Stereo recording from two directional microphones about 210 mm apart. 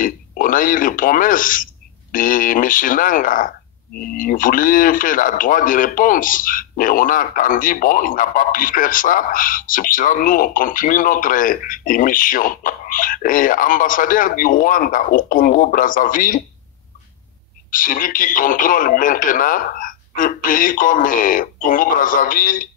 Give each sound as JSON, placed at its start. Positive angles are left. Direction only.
{"t": 0.0, "sound": "a man's voice", "side_deg": 40}
{"t": 17.6, "sound": "speech", "side_deg": 40}